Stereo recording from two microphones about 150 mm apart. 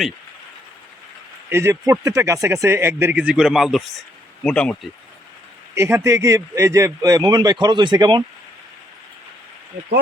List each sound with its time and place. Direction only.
1.5 s speech: 20° right (ahead or behind); by 4.8 s 5° left (ahead or behind)
5.7 s speech: 20° right (ahead or behind)